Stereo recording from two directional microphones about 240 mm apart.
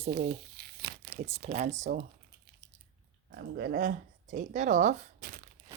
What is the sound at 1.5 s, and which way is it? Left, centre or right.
Speech, right.